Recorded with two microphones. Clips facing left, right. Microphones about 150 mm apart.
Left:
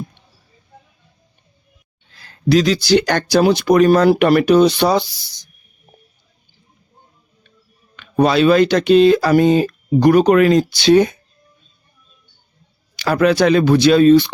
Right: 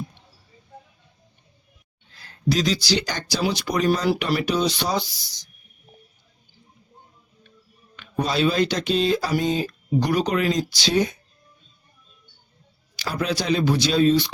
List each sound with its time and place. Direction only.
2.0 s speech: 80° left; by 5.5 s 60° left (ahead or behind)
7.9 s speech: 70° left (ahead or behind)
13.0 s speech: 65° left (ahead or behind)